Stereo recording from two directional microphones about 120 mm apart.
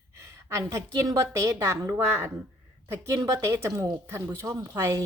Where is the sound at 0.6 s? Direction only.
25° right (ahead or behind).